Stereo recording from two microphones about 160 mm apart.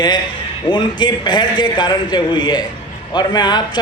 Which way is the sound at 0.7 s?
30° left (ahead or behind).